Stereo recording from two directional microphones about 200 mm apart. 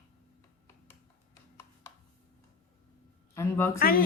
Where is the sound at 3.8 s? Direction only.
50° left (ahead or behind).